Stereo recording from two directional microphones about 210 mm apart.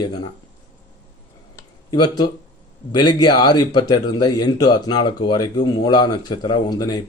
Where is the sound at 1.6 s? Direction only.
20° left (ahead or behind).